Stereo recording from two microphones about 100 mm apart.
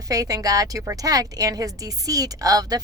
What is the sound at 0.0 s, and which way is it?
Speech, 35° right (ahead or behind).